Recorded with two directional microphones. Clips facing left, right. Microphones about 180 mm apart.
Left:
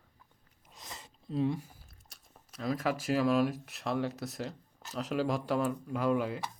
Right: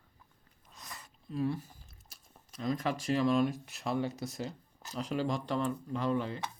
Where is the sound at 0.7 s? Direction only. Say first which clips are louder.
Left 1 dB; 25° left (ahead or behind).